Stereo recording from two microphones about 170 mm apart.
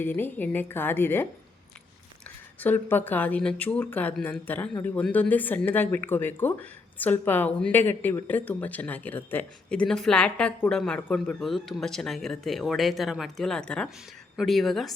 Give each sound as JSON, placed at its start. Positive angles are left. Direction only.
{"t": 0.0, "sound": "speech", "side_deg": 10}
{"t": 2.6, "sound": "speech", "side_deg": 10}